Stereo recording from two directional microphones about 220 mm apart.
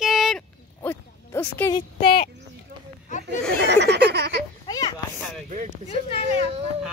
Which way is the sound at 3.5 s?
50° right (ahead or behind).